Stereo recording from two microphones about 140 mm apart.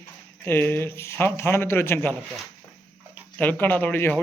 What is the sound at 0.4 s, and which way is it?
Speech, 15° left (ahead or behind).